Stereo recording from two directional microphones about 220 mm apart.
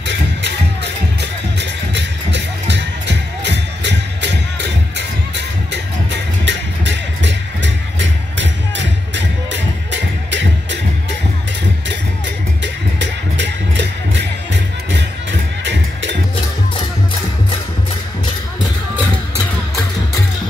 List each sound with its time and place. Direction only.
1.6 s music: 50° right (ahead or behind)
12.6 s music: 55° right (ahead or behind)
15.6 s music: 55° right (ahead or behind)